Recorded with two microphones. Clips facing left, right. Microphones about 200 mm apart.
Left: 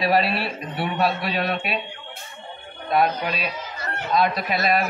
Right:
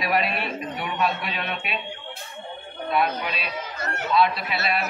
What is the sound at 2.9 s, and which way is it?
A man's voice, 40° left (ahead or behind).